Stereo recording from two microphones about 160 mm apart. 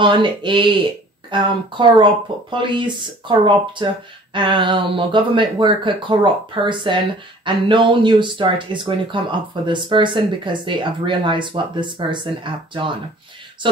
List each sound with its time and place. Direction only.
0.0 s a woman's voice: 30° right (ahead or behind)